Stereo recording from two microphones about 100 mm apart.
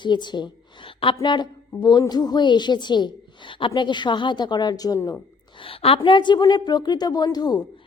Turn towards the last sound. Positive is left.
turn(degrees=45)  # may be behind; listen again after turning